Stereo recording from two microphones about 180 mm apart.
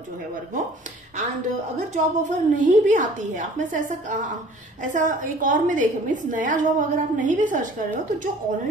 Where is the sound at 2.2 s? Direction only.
45° right (ahead or behind).